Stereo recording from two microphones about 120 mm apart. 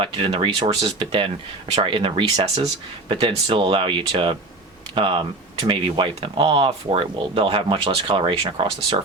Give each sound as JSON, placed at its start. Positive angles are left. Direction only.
{"t": 0.0, "sound": "speech", "side_deg": -45}